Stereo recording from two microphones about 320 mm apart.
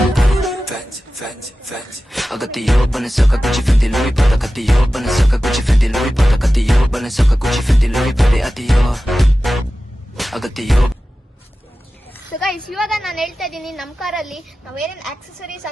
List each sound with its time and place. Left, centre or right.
0.0 s music: centre
2.1 s music: centre
12.4 s music: centre